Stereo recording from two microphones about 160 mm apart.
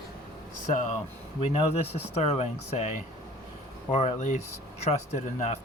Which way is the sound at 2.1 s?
40° left (ahead or behind).